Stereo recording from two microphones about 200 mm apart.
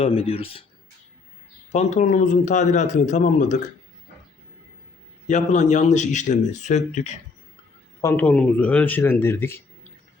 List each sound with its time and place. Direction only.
0.0 s speech: 30° left (ahead or behind)
1.7 s a man's voice: 35° left (ahead or behind)
5.3 s a man's voice: 35° left (ahead or behind)
8.0 s speech: 10° left (ahead or behind)